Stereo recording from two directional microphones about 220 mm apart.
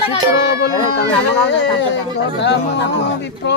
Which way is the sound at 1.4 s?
55° left (ahead or behind).